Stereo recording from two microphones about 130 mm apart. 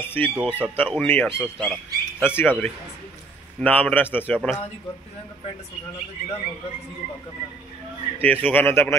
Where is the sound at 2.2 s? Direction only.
15° left (ahead or behind).